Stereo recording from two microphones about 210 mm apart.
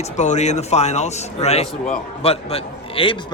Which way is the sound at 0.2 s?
35° left (ahead or behind).